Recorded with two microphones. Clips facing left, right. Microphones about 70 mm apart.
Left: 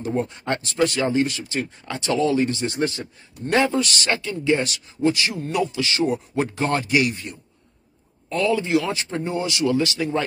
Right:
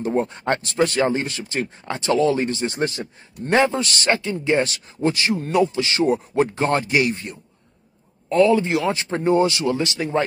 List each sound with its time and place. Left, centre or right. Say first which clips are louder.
0.0 s a man's voice: right 3 dB; right
9.2 s a man's voice: right 7 dB; right